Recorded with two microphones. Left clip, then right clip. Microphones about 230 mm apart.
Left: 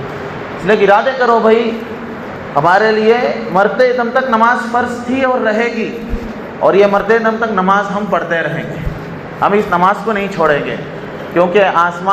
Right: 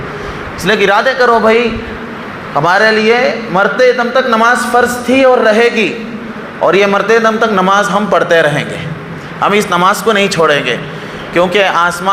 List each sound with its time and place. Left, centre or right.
0.7 s a man's voice: right
2.6 s a man's voice: right
6.7 s a man's voice: right